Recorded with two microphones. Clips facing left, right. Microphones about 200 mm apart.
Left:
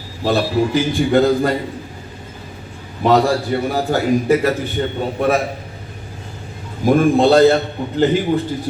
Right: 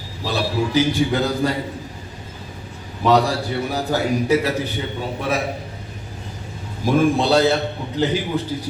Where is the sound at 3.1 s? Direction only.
50° left (ahead or behind).